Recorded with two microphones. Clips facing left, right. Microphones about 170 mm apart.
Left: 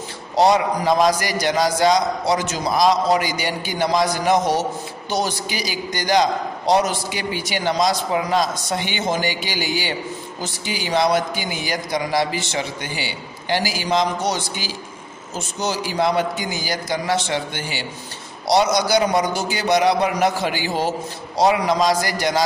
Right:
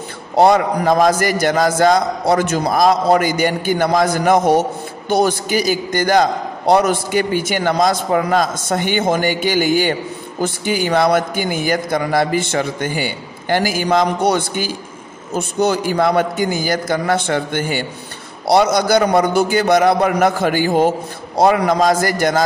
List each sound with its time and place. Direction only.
0.4 s a man's voice: 55° right (ahead or behind)